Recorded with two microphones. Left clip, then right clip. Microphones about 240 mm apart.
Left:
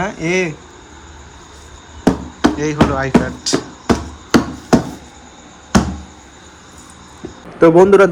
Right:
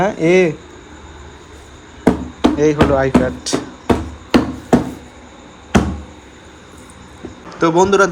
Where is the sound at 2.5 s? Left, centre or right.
Centre.